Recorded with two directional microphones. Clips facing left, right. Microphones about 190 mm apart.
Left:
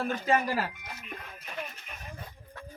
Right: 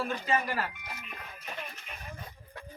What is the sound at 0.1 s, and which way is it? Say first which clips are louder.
Speech: left 3 dB; 45° left (ahead or behind).